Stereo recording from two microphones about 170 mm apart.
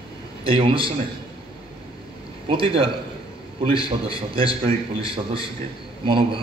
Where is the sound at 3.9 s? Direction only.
30° right (ahead or behind).